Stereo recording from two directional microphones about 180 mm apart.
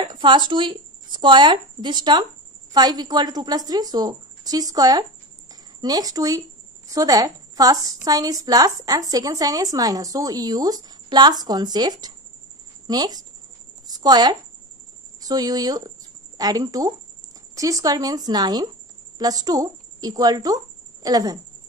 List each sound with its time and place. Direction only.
0.0 s a woman's voice: 25° right (ahead or behind)
13.8 s a sound: 20° right (ahead or behind)
15.1 s a woman's voice: 20° right (ahead or behind)